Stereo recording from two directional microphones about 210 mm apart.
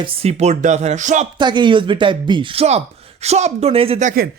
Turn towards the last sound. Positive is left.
turn(degrees=-35)  # may be behind; listen again after turning